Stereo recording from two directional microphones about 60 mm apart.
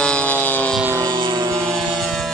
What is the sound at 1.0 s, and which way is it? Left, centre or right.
Vehicle, right.